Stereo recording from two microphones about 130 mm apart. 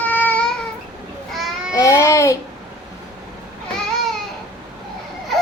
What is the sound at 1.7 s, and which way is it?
Speech, 25° left (ahead or behind).